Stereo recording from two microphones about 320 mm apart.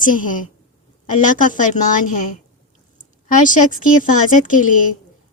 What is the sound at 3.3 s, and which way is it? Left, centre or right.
A woman's voice, left.